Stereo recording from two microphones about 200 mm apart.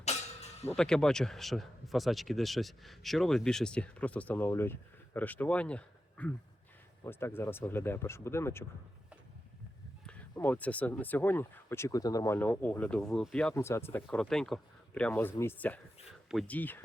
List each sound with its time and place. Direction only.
0.0 s music: 35° left (ahead or behind)
0.8 s speech: 5° left (ahead or behind)
10.1 s speech: 10° left (ahead or behind)